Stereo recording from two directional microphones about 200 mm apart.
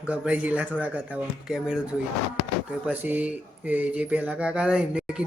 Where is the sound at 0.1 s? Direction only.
5° right (ahead or behind).